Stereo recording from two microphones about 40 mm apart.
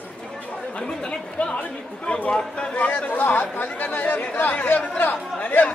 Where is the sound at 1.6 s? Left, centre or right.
Left.